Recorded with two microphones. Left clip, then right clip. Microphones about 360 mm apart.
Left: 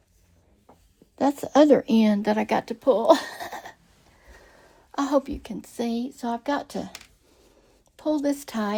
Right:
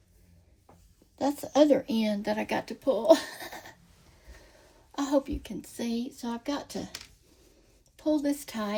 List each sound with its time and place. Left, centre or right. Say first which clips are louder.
1.1 s a woman's voice: left 6 dB; left
4.9 s speech: left 4 dB; left
7.9 s speech: left 3 dB; left